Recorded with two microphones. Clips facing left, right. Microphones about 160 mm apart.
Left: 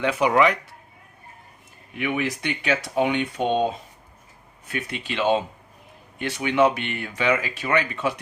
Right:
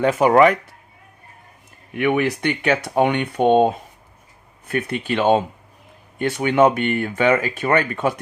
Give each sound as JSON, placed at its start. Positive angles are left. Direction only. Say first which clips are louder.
{"t": 0.0, "sound": "speech", "louder": "right 6 dB", "side_deg": -45}
{"t": 2.0, "sound": "speech", "louder": "right 7 dB", "side_deg": -60}